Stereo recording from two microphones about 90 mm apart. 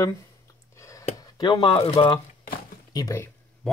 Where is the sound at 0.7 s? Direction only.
35° left (ahead or behind).